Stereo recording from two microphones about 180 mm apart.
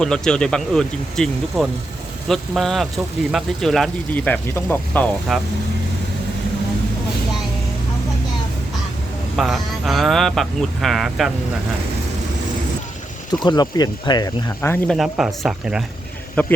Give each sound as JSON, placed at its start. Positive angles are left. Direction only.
{"t": 0.0, "sound": "speech", "side_deg": 5}
{"t": 9.3, "sound": "speech", "side_deg": 0}
{"t": 13.4, "sound": "speech", "side_deg": 25}
{"t": 14.9, "sound": "speech", "side_deg": 0}
{"t": 16.4, "sound": "speech", "side_deg": 10}